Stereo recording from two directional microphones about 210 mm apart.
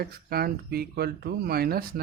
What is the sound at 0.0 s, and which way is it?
Speech, 45° right (ahead or behind).